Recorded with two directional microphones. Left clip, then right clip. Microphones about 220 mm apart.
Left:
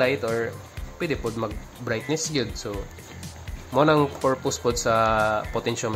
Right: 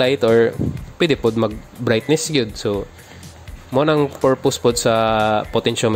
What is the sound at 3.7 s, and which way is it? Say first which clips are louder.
Speech: right 3 dB; 30° right (ahead or behind).